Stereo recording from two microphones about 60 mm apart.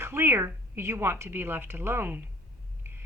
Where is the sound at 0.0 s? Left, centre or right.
Right.